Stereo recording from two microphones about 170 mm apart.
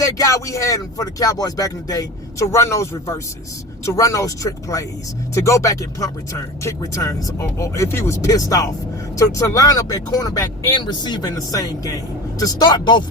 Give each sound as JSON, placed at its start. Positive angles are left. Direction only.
{"t": 0.0, "sound": "speech", "side_deg": 20}